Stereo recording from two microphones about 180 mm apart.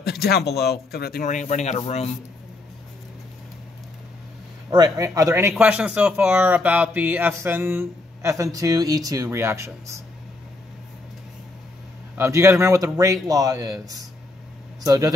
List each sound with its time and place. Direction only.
0.0 s a man's voice: 65° left (ahead or behind); by 2.0 s 35° left (ahead or behind)
4.6 s speech: 20° right (ahead or behind)
12.2 s a man's voice: 15° right (ahead or behind)